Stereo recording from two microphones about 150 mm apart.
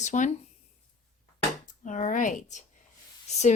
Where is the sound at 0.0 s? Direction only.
55° left (ahead or behind).